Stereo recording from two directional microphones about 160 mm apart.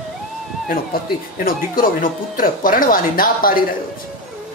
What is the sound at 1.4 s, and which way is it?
Speech, 60° left (ahead or behind).